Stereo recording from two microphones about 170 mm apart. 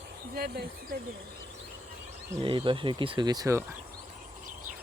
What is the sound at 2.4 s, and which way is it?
Speech, 30° right (ahead or behind).